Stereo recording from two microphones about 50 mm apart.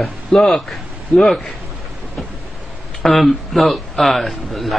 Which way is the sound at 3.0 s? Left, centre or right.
Centre.